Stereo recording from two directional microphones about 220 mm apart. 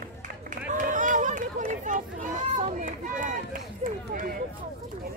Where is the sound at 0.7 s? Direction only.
35° right (ahead or behind).